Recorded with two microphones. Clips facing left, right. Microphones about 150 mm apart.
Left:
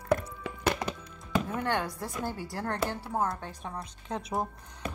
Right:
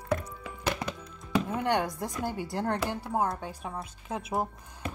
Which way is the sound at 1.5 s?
15° right (ahead or behind).